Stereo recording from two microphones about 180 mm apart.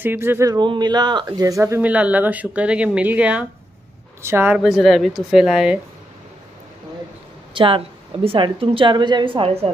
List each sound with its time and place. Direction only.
0.0 s speech: 10° right (ahead or behind)
7.5 s a woman's voice: 30° right (ahead or behind)